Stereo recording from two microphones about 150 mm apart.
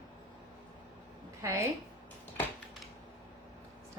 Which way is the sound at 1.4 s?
20° right (ahead or behind).